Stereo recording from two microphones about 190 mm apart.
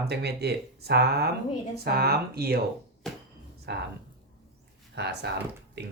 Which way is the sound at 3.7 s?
60° right (ahead or behind).